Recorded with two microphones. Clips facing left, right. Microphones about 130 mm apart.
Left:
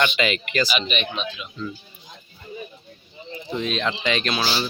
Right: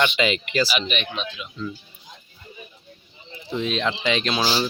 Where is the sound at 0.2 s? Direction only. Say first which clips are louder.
Right 1 dB; 20° right (ahead or behind).